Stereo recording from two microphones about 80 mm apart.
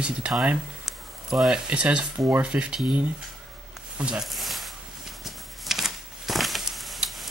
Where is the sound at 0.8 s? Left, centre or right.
Centre.